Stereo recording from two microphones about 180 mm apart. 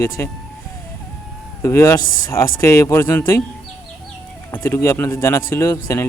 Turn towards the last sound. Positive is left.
turn(degrees=15)  # may be behind; listen again after turning